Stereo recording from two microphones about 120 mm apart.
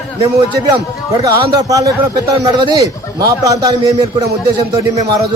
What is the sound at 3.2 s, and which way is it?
A man's voice, 30° right (ahead or behind).